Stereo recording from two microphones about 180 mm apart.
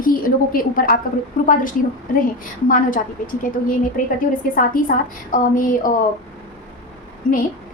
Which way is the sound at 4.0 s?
50° left (ahead or behind).